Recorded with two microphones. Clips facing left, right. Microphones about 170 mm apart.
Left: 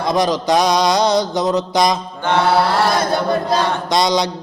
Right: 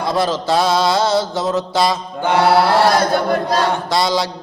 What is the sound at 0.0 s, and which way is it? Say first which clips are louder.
Mantra: left 1 dB; 15° left (ahead or behind).